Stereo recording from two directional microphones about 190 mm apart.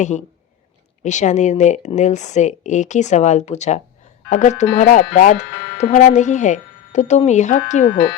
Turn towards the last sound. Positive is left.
turn(degrees=40)  # may be behind; listen again after turning